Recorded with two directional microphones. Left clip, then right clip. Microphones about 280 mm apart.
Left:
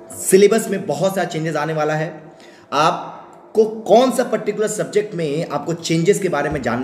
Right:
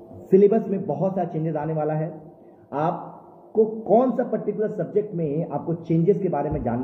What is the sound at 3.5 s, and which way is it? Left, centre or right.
A woman's voice, left.